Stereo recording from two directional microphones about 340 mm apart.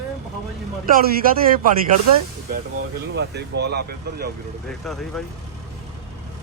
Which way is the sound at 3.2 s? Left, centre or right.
Right.